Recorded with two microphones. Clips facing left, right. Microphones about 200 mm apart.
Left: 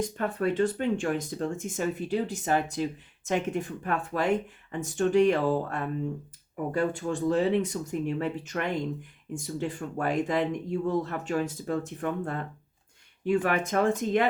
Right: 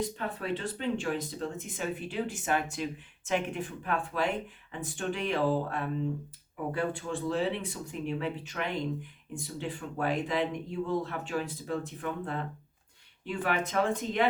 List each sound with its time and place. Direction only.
0.0 s speech: 45° left (ahead or behind)